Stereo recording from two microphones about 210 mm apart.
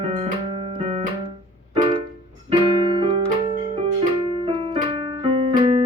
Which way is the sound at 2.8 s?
25° right (ahead or behind).